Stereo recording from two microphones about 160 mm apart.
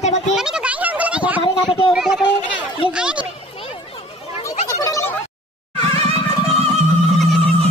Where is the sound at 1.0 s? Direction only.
10° right (ahead or behind).